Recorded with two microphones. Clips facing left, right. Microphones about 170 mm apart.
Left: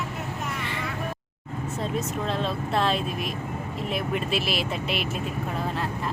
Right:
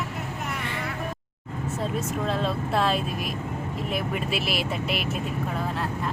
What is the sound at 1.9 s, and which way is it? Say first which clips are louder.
Speech: even; 5° right (ahead or behind).